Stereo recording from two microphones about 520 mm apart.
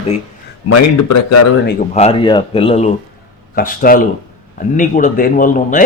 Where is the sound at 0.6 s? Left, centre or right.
Left.